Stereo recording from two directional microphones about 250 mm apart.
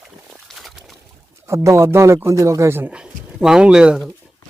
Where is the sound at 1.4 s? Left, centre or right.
Centre.